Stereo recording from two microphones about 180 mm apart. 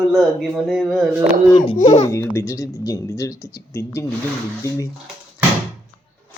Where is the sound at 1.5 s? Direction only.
25° left (ahead or behind).